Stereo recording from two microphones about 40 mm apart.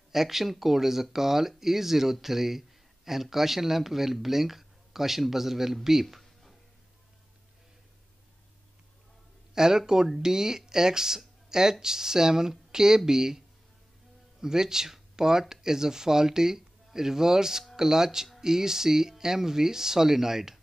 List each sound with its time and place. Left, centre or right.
0.1 s speech: centre
5.9 s a sound: centre
9.5 s speech: centre
14.4 s speech: centre